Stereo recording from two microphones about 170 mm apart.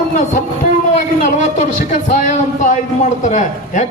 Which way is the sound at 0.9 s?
45° left (ahead or behind).